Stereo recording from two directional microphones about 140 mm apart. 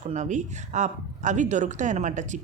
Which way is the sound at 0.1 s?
60° right (ahead or behind).